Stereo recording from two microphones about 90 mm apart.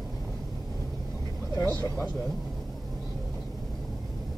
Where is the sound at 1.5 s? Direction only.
35° left (ahead or behind).